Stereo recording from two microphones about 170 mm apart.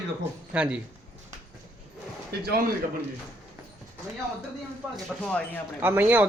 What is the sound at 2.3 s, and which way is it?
Speech, 65° right (ahead or behind).